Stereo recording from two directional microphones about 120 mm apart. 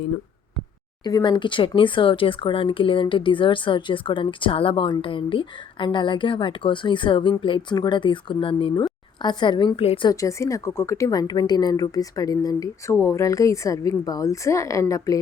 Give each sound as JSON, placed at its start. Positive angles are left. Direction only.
{"t": 1.0, "sound": "a woman's voice", "side_deg": 40}
{"t": 10.1, "sound": "a woman's voice", "side_deg": 25}